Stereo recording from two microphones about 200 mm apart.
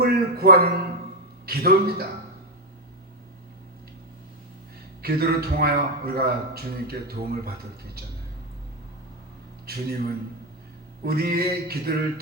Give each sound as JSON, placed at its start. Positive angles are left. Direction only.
{"t": 0.0, "sound": "a sound", "side_deg": -50}
{"t": 1.5, "sound": "a man's voice", "side_deg": -50}
{"t": 5.0, "sound": "a man's voice", "side_deg": -50}
{"t": 9.6, "sound": "a man's voice", "side_deg": -50}